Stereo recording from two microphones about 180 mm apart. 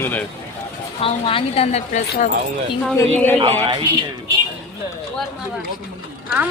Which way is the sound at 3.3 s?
30° right (ahead or behind).